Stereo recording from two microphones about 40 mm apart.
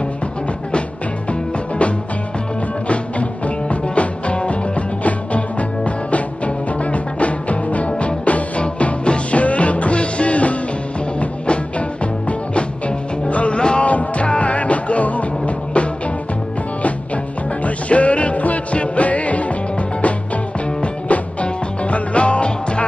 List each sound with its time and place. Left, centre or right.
2.9 s music: left
13.3 s music: left
17.6 s music: left
20.8 s music: left